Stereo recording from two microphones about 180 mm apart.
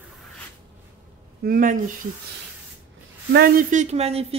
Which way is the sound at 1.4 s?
50° right (ahead or behind).